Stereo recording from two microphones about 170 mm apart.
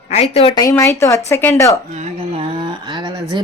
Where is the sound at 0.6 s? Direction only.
20° left (ahead or behind).